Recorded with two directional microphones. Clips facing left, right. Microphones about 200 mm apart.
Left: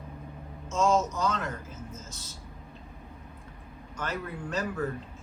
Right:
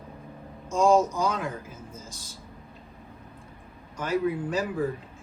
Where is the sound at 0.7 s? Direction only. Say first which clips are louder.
Right 5 dB; 15° right (ahead or behind).